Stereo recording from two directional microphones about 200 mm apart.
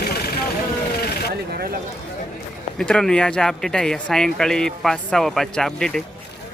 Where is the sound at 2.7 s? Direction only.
5° left (ahead or behind).